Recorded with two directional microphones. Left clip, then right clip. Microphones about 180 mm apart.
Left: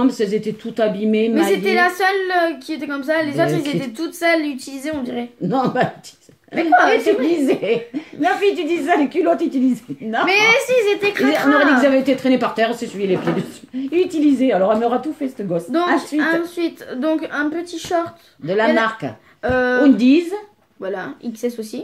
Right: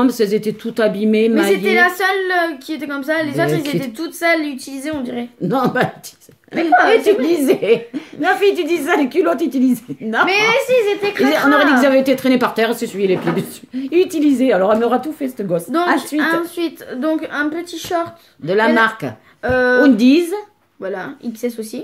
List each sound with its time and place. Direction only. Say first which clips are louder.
0.0 s a woman's voice: right 3 dB; 55° right (ahead or behind)
1.5 s a woman's voice: right 3 dB; 10° right (ahead or behind)
5.5 s a woman's voice: right 2 dB; 55° right (ahead or behind)
6.5 s a woman's voice: right 2 dB; centre (ahead or behind)
7.2 s a woman's voice: right 3 dB; 55° right (ahead or behind)
10.2 s a woman's voice: even; 5° right (ahead or behind)
11.2 s a woman's voice: right 3 dB; 55° right (ahead or behind)
11.5 s a woman's voice: even; centre (ahead or behind)
11.8 s a woman's voice: right 2 dB; 55° right (ahead or behind)
16.2 s a woman's voice: right 1 dB; 15° right (ahead or behind)
18.4 s a woman's voice: right 3 dB; 55° right (ahead or behind)
19.4 s a woman's voice: right 3 dB; 5° right (ahead or behind)
19.8 s a woman's voice: right 2 dB; 55° right (ahead or behind)
20.8 s a woman's voice: right 1 dB; 5° right (ahead or behind)